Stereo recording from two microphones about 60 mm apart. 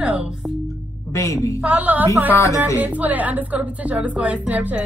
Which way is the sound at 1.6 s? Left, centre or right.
Right.